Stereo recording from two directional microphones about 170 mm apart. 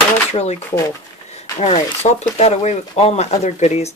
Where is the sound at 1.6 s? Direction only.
40° left (ahead or behind).